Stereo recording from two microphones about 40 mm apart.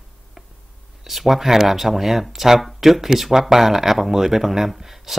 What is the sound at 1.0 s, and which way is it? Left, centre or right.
Speech, centre.